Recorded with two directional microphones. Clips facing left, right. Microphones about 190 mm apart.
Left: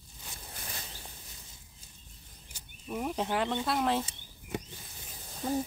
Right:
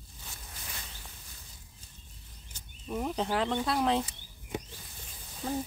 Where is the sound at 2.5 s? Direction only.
5° left (ahead or behind).